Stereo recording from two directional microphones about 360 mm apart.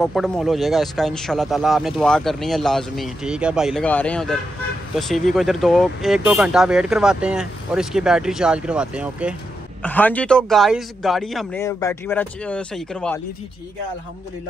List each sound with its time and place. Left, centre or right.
0.0 s speech: centre